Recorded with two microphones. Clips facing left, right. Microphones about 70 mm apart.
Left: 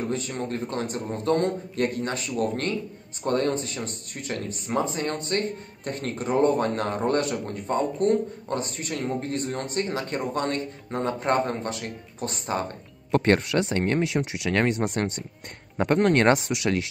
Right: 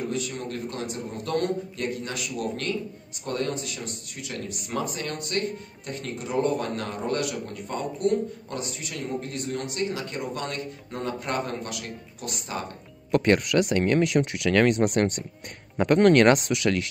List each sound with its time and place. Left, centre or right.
0.1 s a man's voice: left
1.2 s speech: left
1.8 s a man's voice: left